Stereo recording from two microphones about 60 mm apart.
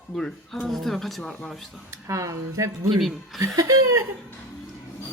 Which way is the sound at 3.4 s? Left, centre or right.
Right.